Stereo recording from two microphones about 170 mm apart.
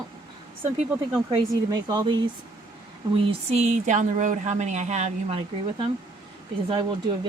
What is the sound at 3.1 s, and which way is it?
Speech, 35° right (ahead or behind).